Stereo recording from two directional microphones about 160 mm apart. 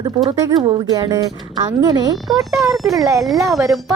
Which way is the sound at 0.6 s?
35° right (ahead or behind).